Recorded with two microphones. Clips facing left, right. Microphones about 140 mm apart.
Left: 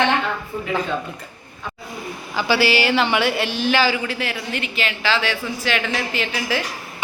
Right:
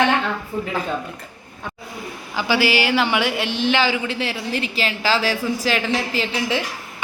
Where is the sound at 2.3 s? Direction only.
15° right (ahead or behind).